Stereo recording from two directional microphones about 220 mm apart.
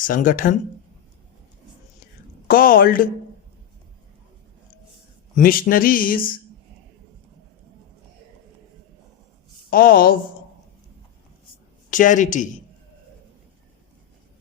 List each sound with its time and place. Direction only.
0.0 s a man's voice: 35° left (ahead or behind)
2.5 s a man's voice: 40° left (ahead or behind)
5.3 s a man's voice: 40° left (ahead or behind)
9.6 s a man's voice: 40° left (ahead or behind)
11.9 s a man's voice: 35° left (ahead or behind)